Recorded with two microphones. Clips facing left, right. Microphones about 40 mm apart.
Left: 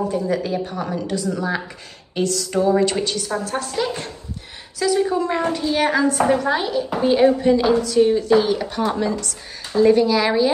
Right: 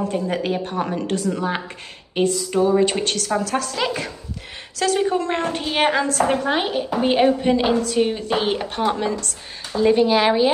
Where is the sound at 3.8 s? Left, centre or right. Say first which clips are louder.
Left 2 dB; right.